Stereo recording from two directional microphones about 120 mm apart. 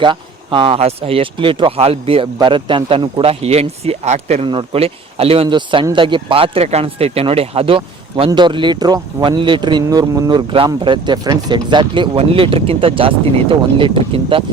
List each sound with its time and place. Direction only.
0.0 s speech: 45° right (ahead or behind); by 4.4 s 65° right (ahead or behind)
4.4 s speech: 50° right (ahead or behind)